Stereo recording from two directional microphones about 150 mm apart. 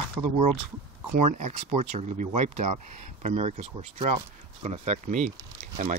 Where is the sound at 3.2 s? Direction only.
45° right (ahead or behind).